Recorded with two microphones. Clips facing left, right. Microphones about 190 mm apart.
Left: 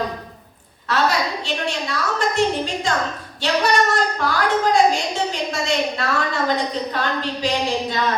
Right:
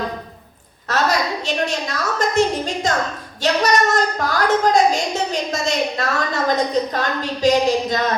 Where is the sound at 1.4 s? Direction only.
45° right (ahead or behind).